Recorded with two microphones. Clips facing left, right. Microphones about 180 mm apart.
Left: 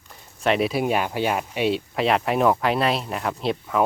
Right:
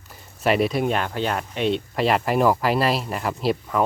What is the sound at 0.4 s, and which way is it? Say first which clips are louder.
Speech: right 1 dB; centre (ahead or behind).